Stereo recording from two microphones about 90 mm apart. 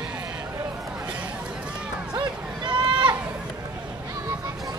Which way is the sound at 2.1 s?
60° right (ahead or behind).